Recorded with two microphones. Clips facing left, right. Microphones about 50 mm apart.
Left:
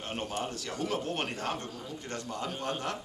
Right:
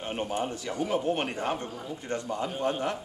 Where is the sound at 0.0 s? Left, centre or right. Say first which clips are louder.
Right 4 dB; centre.